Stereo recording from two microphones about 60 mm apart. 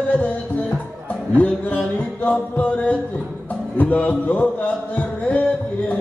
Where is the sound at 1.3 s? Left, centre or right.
Left.